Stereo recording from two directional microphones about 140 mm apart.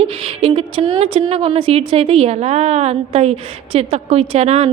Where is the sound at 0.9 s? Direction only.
40° right (ahead or behind).